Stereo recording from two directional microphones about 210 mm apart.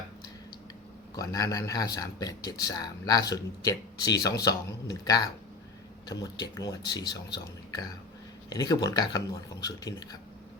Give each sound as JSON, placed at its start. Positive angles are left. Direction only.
{"t": 1.1, "sound": "speech", "side_deg": 15}